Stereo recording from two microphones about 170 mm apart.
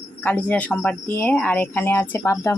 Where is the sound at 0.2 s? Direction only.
10° left (ahead or behind).